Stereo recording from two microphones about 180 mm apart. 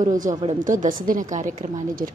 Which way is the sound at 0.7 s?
50° right (ahead or behind).